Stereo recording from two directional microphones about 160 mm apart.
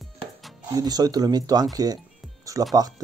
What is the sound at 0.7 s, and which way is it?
Speech, 25° right (ahead or behind).